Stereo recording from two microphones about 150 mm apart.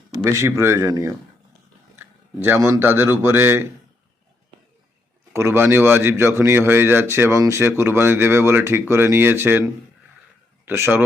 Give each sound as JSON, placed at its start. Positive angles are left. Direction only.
{"t": 0.2, "sound": "speech", "side_deg": -20}
{"t": 2.4, "sound": "speech", "side_deg": -15}
{"t": 5.3, "sound": "speech", "side_deg": -15}
{"t": 10.7, "sound": "speech", "side_deg": -15}